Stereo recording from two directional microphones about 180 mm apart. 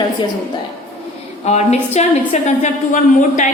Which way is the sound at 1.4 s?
40° left (ahead or behind).